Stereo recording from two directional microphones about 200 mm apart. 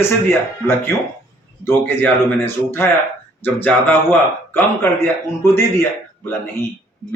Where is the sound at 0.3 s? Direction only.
10° left (ahead or behind).